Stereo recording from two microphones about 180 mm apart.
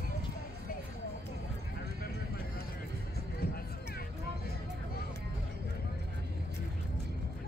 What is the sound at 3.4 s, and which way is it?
Music, 55° left (ahead or behind).